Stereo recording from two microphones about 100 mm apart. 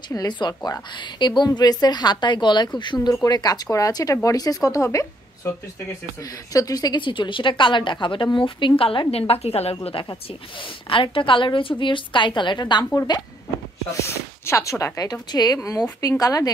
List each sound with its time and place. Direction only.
0.1 s a woman's voice: 45° left (ahead or behind)
6.5 s a woman's voice: 40° left (ahead or behind); by 9.0 s 60° left (ahead or behind)
9.3 s a woman's voice: 85° left
10.9 s a woman's voice: 60° left (ahead or behind)
14.0 s speech: 25° left (ahead or behind)